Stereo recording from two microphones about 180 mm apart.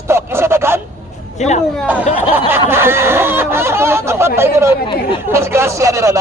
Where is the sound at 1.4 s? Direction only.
40° left (ahead or behind).